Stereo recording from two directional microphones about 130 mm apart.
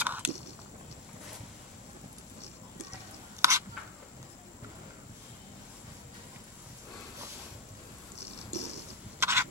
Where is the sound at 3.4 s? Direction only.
20° right (ahead or behind).